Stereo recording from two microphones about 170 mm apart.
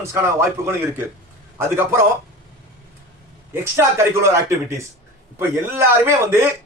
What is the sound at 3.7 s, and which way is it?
A man's voice, 15° right (ahead or behind).